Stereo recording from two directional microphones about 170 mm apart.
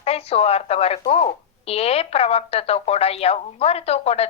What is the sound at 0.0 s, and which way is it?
A woman's voice, 35° left (ahead or behind).